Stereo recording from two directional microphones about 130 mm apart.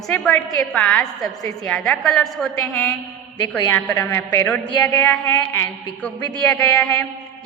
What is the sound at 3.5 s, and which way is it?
A woman's voice, 10° left (ahead or behind).